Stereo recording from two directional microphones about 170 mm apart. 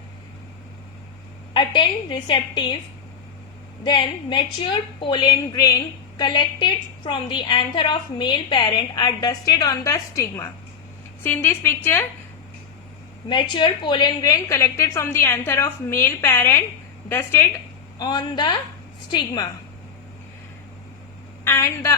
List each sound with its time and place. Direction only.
1.5 s a woman's voice: 25° left (ahead or behind)
3.8 s a woman's voice: 25° left (ahead or behind)
13.2 s a woman's voice: 25° left (ahead or behind)
18.0 s a woman's voice: 25° left (ahead or behind)
21.4 s a woman's voice: 15° left (ahead or behind)